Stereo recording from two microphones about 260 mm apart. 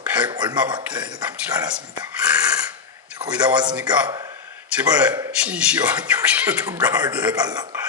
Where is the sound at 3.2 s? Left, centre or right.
Centre.